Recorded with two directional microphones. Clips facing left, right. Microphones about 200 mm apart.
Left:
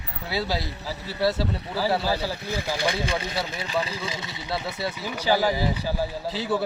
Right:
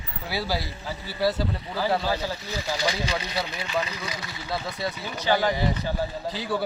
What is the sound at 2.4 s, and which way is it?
Speech, 55° left (ahead or behind).